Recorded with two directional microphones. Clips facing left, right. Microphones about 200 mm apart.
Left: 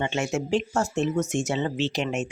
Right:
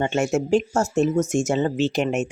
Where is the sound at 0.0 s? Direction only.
45° right (ahead or behind).